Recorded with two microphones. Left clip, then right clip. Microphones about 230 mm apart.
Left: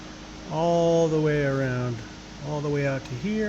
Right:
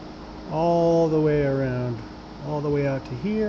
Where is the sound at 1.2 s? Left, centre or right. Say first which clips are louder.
Right 2 dB; centre.